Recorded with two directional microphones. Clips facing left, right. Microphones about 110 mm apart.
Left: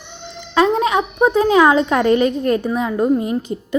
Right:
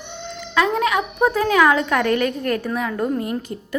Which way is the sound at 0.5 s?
25° left (ahead or behind).